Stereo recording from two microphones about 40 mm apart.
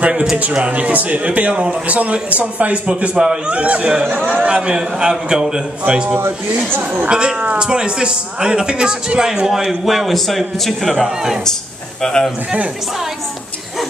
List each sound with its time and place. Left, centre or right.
0.0 s a man's voice: right
3.2 s a man's voice: right
3.6 s a man's voice: right
7.1 s a man's voice: right; by 10.1 s centre
10.1 s a man's voice: centre
12.0 s speech: centre